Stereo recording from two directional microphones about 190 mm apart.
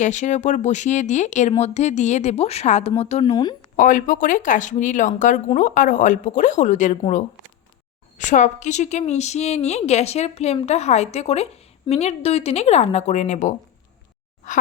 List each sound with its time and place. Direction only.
0.0 s speech: 40° left (ahead or behind)
3.8 s speech: 45° left (ahead or behind)
8.2 s speech: 40° left (ahead or behind)